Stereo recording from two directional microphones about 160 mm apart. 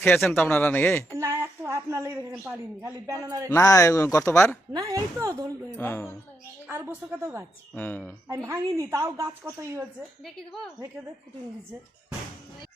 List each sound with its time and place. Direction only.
0.0 s a woman's voice: 5° left (ahead or behind)
1.1 s a woman's voice: 20° right (ahead or behind)
3.5 s speech: 20° left (ahead or behind)
4.7 s a woman's voice: 25° right (ahead or behind)
5.7 s speech: 15° left (ahead or behind)
6.7 s a woman's voice: 15° right (ahead or behind)
7.7 s speech: 10° left (ahead or behind)
8.3 s a woman's voice: 20° right (ahead or behind)
10.2 s a woman's voice: centre (ahead or behind)